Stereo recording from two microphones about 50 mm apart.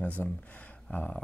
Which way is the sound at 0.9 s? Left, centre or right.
Left.